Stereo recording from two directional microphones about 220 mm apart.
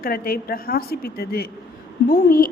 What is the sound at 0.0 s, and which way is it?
A woman's voice, 40° left (ahead or behind).